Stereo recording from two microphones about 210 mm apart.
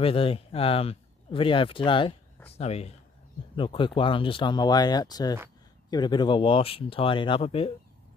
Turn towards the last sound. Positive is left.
turn(degrees=25)  # may be behind; listen again after turning